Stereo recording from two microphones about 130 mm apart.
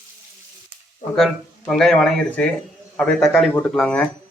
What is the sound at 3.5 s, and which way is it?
Speech, 15° left (ahead or behind).